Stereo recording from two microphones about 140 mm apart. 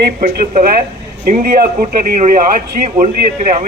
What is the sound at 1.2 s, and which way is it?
Speech, 85° right.